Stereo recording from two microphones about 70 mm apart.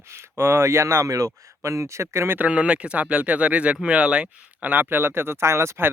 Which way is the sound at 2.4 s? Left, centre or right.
Centre.